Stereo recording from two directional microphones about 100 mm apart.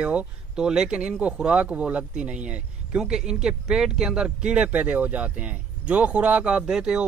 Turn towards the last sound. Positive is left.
turn(degrees=-10)  # may be behind; listen again after turning